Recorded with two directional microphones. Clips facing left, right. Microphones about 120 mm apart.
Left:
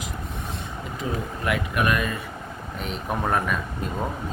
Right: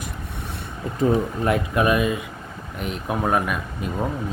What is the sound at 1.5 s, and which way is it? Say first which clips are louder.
Speech: right 3 dB; 30° right (ahead or behind).